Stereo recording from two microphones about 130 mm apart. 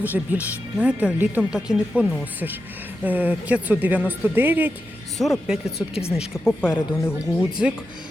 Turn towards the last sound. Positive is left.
turn(degrees=-5)  # may be behind; listen again after turning